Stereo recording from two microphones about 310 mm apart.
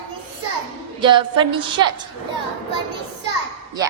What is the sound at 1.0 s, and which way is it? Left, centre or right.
Speech, centre.